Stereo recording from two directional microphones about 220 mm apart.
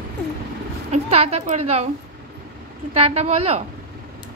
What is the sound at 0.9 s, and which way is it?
Speech, 30° right (ahead or behind).